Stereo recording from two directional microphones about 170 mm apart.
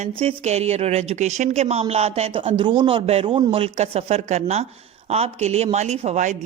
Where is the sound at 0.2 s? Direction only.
35° right (ahead or behind).